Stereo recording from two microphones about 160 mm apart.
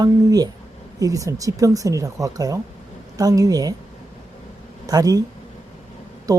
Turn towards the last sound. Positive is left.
turn(degrees=-20)  # may be behind; listen again after turning